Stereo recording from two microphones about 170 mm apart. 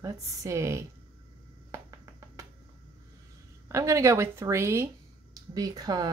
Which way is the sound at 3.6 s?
15° right (ahead or behind).